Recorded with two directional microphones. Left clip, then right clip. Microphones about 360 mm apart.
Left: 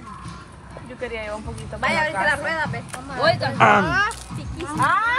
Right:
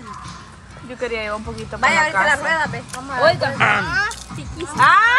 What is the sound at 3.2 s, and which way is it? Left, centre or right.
Speech, centre.